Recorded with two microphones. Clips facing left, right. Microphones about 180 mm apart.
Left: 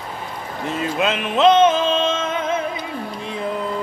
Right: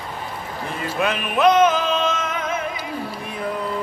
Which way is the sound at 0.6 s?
20° left (ahead or behind).